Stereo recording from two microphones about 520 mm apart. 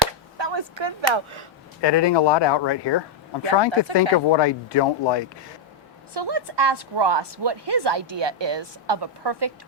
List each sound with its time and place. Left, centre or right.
0.3 s a sound: right
1.0 s speech: right
1.8 s speech: left
6.1 s a woman's voice: right